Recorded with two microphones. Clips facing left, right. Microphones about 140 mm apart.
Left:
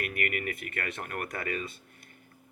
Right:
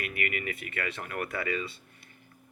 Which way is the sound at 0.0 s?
50° left (ahead or behind).